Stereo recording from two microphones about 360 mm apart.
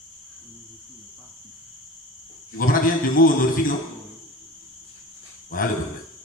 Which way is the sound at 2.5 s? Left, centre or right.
Left.